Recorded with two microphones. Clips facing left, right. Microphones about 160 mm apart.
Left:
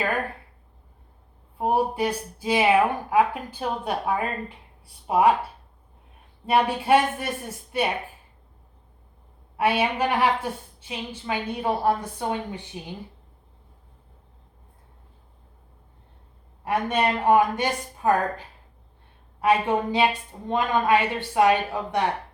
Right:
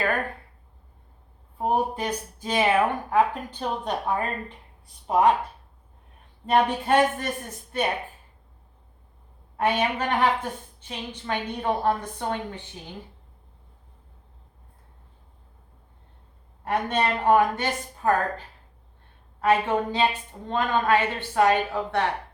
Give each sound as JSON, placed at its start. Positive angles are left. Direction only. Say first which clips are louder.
{"t": 1.5, "sound": "speech", "louder": "left 2 dB", "side_deg": 10}
{"t": 6.4, "sound": "speech", "louder": "even", "side_deg": 10}
{"t": 9.6, "sound": "speech", "louder": "left 2 dB", "side_deg": 10}
{"t": 16.6, "sound": "speech", "louder": "left 1 dB", "side_deg": 10}